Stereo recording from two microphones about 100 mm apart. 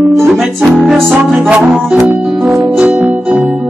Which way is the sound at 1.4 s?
15° right (ahead or behind).